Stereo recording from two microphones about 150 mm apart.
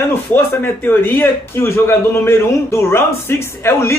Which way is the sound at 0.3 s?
15° left (ahead or behind).